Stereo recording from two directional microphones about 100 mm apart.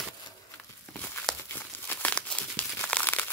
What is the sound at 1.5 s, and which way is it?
Crumpling, 20° left (ahead or behind).